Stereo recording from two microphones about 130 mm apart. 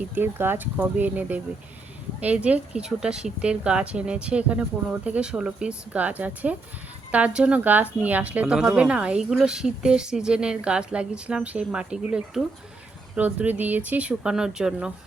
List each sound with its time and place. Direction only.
0.1 s speech: 15° right (ahead or behind)